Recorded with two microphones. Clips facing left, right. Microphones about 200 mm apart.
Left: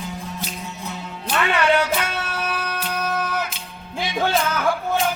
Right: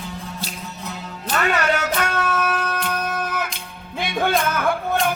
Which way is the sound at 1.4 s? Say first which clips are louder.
Left 2 dB; 40° right (ahead or behind).